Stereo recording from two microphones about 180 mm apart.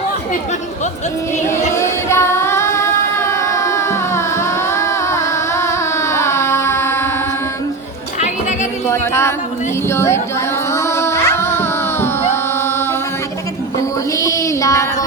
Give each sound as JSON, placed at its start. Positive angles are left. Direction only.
{"t": 1.7, "sound": "singing", "side_deg": 15}
{"t": 8.9, "sound": "music", "side_deg": 15}
{"t": 9.9, "sound": "speech", "side_deg": 15}
{"t": 10.7, "sound": "music", "side_deg": 15}
{"t": 14.2, "sound": "child singing", "side_deg": 20}